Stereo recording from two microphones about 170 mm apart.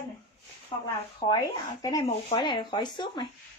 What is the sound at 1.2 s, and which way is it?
A woman's voice, 25° left (ahead or behind).